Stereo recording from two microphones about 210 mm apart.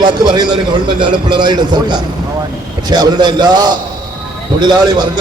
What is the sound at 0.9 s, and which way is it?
A man's voice, 20° right (ahead or behind).